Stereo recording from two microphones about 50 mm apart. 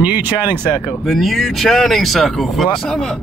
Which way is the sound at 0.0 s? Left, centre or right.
Right.